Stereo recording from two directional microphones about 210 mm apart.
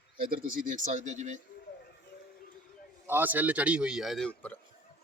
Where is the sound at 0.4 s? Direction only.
40° right (ahead or behind).